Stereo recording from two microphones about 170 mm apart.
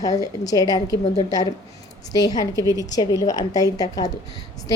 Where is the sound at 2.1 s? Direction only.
20° left (ahead or behind).